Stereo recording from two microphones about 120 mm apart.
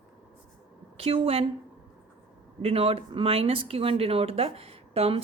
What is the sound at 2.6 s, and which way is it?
A woman's voice, 55° right (ahead or behind).